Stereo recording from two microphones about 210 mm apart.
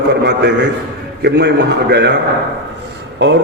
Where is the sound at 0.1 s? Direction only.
55° right (ahead or behind).